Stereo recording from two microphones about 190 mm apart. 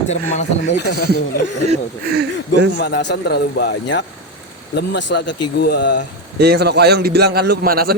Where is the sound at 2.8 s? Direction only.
65° left (ahead or behind).